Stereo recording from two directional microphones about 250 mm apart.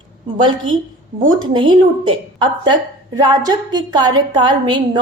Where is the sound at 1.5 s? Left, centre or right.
Centre.